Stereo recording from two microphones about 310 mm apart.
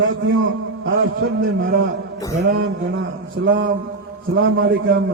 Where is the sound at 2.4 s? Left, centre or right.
Right.